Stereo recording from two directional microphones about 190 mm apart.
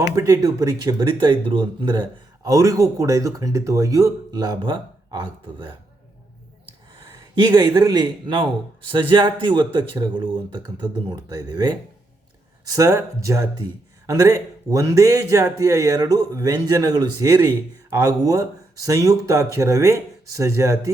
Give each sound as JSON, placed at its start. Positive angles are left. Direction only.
{"t": 0.2, "sound": "speech", "side_deg": -15}
{"t": 6.9, "sound": "a man's voice", "side_deg": -25}